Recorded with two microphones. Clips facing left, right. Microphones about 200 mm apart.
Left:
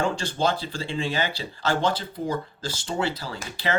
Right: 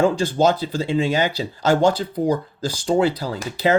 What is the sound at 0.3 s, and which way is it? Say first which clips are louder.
Speech: right 7 dB; 45° right (ahead or behind).